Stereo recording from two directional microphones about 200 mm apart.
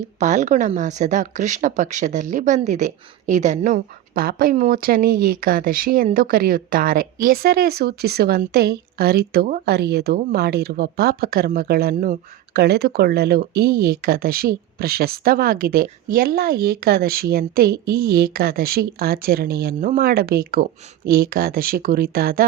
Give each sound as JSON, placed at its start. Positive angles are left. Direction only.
{"t": 0.2, "sound": "speech", "side_deg": -35}